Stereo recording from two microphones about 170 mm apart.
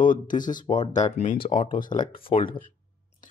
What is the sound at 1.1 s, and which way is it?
Speech, 45° left (ahead or behind).